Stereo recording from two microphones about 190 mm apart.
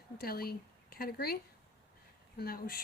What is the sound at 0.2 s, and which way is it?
Speech, 50° left (ahead or behind).